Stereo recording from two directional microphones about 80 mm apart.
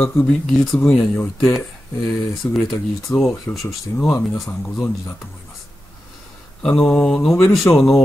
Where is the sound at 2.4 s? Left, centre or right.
Left.